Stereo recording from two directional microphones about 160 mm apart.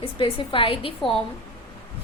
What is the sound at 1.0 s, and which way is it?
Speech, centre (ahead or behind).